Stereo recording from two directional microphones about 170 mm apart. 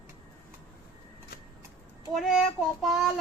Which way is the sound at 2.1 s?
Centre (ahead or behind).